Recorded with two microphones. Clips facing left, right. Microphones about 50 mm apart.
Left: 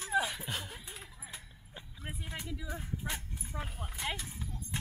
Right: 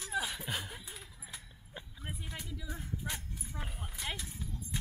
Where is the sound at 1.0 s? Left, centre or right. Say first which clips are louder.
Left 2 dB; left.